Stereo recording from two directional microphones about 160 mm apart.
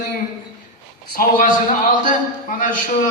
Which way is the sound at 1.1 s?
60° left (ahead or behind).